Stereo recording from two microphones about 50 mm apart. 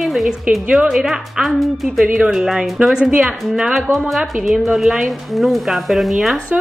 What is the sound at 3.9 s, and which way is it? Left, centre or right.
Speech, centre.